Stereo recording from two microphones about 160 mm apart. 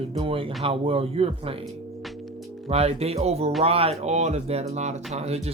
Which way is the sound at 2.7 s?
40° right (ahead or behind).